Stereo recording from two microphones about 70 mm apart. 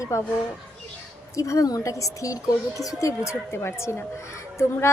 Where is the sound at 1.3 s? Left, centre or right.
Left.